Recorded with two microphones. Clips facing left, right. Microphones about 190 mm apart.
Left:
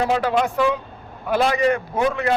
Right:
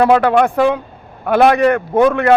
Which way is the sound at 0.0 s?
60° right (ahead or behind).